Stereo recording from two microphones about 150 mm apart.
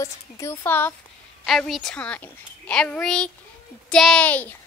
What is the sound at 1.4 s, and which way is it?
A child's voice, 5° left (ahead or behind).